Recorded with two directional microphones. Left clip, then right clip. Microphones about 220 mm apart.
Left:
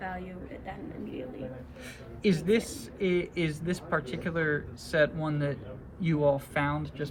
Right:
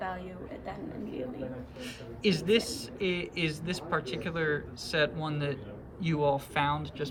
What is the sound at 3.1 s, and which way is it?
A man's voice, 90° right.